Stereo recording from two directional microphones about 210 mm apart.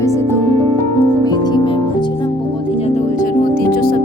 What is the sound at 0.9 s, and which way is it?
Music, 20° left (ahead or behind).